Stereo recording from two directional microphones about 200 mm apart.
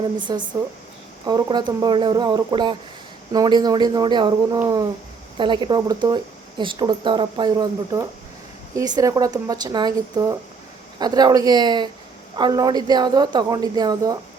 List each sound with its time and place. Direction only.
0.3 s a woman's voice: 20° right (ahead or behind)